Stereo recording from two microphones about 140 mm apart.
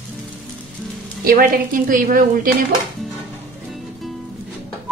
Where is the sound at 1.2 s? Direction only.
90° right.